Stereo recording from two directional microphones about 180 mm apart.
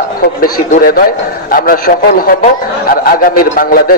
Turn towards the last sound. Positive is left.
turn(degrees=55)  # may be behind; listen again after turning